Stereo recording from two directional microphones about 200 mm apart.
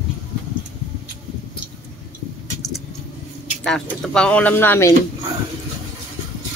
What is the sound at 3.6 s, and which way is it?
Speech, 5° left (ahead or behind).